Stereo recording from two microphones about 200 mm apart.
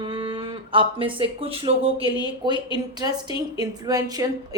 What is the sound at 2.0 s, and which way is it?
Speech, 20° left (ahead or behind).